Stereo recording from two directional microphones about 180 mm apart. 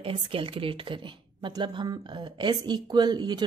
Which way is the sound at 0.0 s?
30° right (ahead or behind).